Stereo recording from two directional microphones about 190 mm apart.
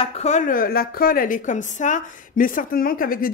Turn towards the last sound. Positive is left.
turn(degrees=50)  # may be behind; listen again after turning